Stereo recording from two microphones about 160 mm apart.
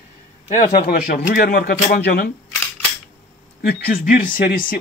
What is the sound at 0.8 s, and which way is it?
Speech, 70° left (ahead or behind).